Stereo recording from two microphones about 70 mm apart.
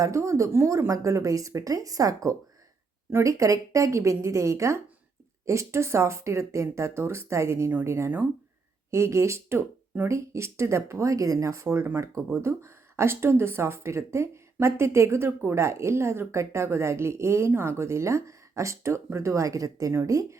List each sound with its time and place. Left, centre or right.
0.0 s speech: right